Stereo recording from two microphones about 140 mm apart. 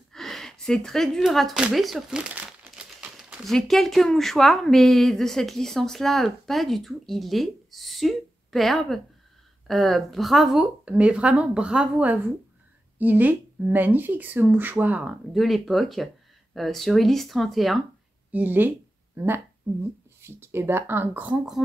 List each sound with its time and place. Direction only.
0.1 s speech: centre (ahead or behind)
18.3 s speech: 15° right (ahead or behind)